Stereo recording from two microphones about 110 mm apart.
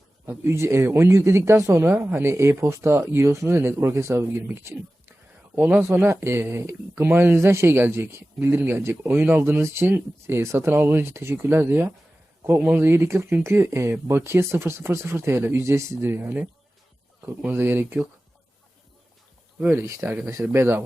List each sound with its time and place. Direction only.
0.3 s speech: 25° right (ahead or behind)
19.5 s speech: 20° right (ahead or behind)